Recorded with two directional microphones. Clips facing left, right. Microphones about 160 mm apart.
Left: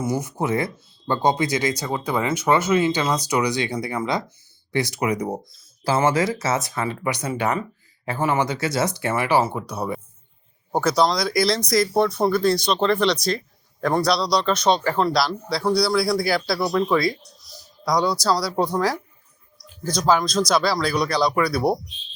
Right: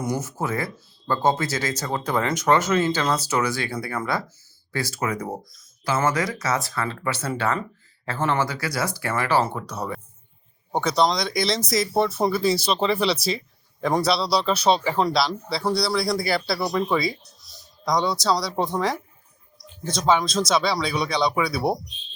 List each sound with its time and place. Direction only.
0.0 s speech: 10° left (ahead or behind)
5.5 s a sound: 30° left (ahead or behind)
6.1 s speech: 25° left (ahead or behind); by 21.8 s centre (ahead or behind)